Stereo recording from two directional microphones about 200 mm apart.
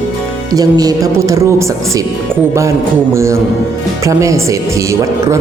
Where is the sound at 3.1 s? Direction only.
15° right (ahead or behind).